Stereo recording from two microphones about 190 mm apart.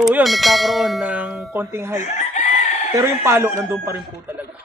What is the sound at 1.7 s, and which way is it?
Speech, 15° right (ahead or behind).